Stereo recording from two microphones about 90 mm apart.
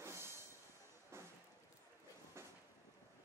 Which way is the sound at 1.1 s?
30° right (ahead or behind).